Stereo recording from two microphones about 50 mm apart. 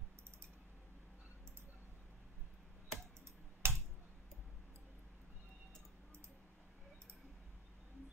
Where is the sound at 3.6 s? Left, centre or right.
Right.